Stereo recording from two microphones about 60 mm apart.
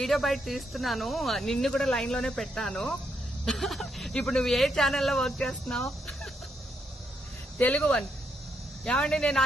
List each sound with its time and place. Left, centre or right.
0.0 s speech: centre
7.6 s speech: left